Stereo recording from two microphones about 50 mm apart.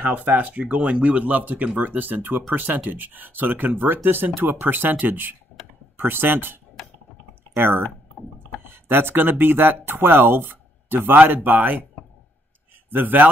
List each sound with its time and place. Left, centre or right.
0.0 s speech: right
12.9 s speech: right